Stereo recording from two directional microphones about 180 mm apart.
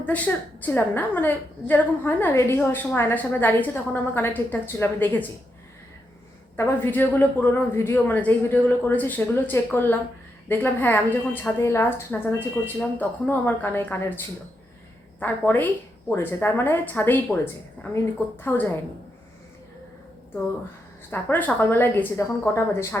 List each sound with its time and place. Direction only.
0.0 s a woman's voice: 10° left (ahead or behind)
6.6 s a woman's voice: 10° left (ahead or behind)
21.1 s a woman's voice: 10° left (ahead or behind)